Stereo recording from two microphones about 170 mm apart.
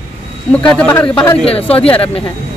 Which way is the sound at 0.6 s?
5° left (ahead or behind).